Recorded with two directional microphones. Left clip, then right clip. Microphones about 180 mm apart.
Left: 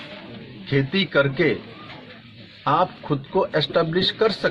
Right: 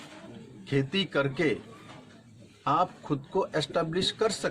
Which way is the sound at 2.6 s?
15° right (ahead or behind).